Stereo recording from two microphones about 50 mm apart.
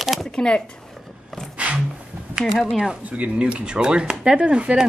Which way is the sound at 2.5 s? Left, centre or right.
Centre.